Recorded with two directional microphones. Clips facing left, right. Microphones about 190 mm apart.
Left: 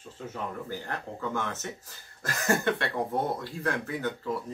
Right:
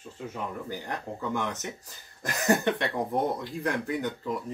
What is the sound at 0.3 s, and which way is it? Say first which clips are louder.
Speech: even; 15° right (ahead or behind).